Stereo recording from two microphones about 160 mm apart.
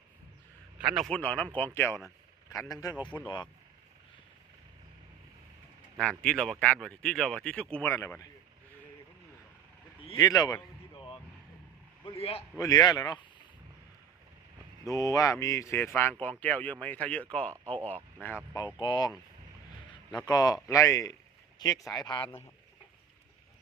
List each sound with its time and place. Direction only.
0.8 s speech: 5° right (ahead or behind); by 2.0 s 15° left (ahead or behind)
2.0 s a sound: centre (ahead or behind)
3.1 s speech: 20° left (ahead or behind)
6.0 s speech: 5° left (ahead or behind)
10.2 s a sound: 20° left (ahead or behind)
12.0 s a man's voice: 40° left (ahead or behind)
12.5 s speech: 25° left (ahead or behind)
14.8 s speech: 20° left (ahead or behind)
18.5 s speech: 30° left (ahead or behind)
20.1 s speech: 25° left (ahead or behind)